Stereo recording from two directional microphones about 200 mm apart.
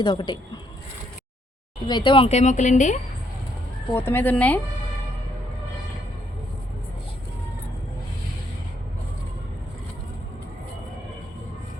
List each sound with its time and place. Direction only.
0.0 s speech: 20° left (ahead or behind)
1.9 s speech: 25° left (ahead or behind)
3.9 s speech: 10° left (ahead or behind)